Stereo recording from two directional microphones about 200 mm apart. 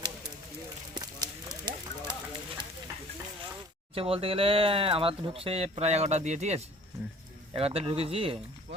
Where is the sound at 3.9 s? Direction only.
30° right (ahead or behind).